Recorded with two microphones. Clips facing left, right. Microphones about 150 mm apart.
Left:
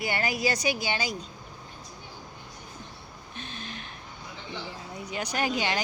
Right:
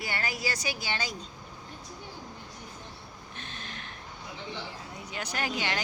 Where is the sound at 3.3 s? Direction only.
15° left (ahead or behind).